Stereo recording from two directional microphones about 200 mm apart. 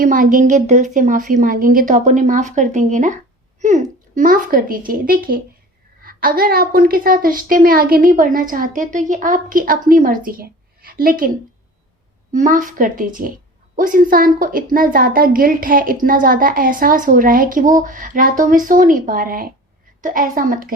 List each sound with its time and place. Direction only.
0.0 s a woman's voice: 45° right (ahead or behind)
12.3 s a woman's voice: 40° right (ahead or behind)